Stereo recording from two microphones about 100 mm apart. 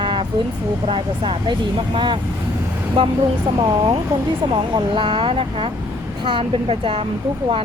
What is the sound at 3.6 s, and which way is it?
A woman's voice, 40° right (ahead or behind).